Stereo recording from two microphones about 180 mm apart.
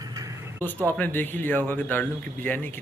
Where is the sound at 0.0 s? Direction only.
20° right (ahead or behind).